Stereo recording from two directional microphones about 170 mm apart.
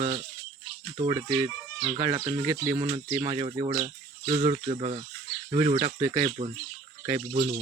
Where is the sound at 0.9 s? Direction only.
25° right (ahead or behind).